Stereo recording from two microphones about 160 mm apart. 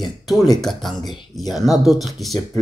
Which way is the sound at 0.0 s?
Centre (ahead or behind).